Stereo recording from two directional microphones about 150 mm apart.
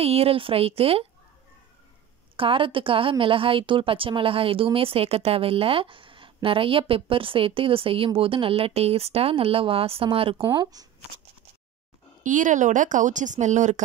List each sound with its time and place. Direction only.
0.0 s a woman's voice: 40° right (ahead or behind)
2.3 s a woman's voice: 35° right (ahead or behind)
10.4 s speech: 25° right (ahead or behind)
12.2 s speech: 60° right (ahead or behind)